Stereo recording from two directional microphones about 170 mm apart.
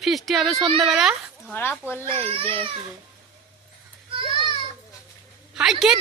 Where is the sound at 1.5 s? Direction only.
10° left (ahead or behind).